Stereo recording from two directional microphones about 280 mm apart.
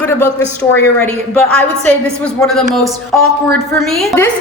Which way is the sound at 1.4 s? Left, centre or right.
Centre.